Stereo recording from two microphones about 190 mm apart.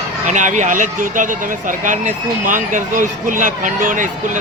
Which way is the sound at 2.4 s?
45° right (ahead or behind).